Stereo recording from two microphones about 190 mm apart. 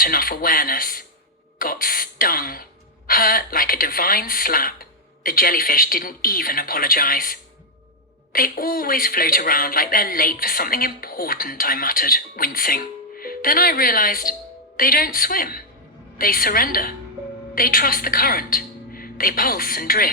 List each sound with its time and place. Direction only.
0.0 s a woman's voice: 50° left (ahead or behind)